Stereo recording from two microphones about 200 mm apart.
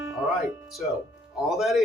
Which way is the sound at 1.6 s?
Centre (ahead or behind).